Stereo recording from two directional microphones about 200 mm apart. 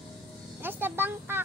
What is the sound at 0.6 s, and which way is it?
Speech, 10° right (ahead or behind).